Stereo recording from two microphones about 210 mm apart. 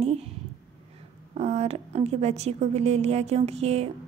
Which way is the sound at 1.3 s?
30° right (ahead or behind).